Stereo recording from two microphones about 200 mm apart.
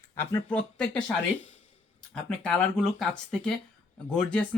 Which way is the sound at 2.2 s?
5° left (ahead or behind).